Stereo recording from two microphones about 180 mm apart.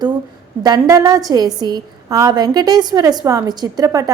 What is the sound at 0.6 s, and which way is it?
A woman's voice, 20° right (ahead or behind).